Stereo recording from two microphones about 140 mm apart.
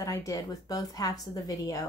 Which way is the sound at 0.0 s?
25° left (ahead or behind).